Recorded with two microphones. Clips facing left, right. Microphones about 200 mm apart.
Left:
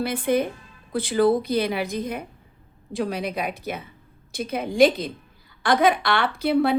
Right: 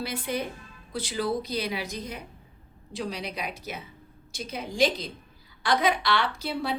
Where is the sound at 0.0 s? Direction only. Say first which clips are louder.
Left 8 dB; 55° left (ahead or behind).